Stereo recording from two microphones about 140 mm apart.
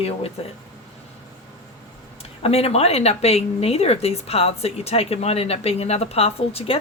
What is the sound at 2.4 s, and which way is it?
Speech, 45° left (ahead or behind).